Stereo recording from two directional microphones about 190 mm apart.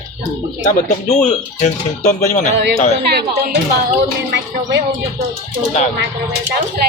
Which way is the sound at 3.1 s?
55° right (ahead or behind).